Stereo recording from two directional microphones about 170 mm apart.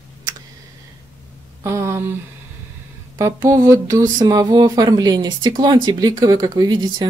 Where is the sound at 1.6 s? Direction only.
15° right (ahead or behind).